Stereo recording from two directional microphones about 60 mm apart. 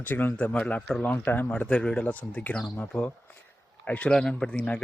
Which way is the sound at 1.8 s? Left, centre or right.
Centre.